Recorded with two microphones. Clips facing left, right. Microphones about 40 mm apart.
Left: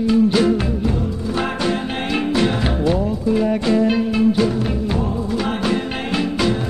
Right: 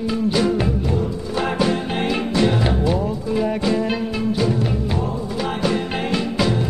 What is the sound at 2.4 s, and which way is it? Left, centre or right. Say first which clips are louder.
Music: right 3 dB; centre.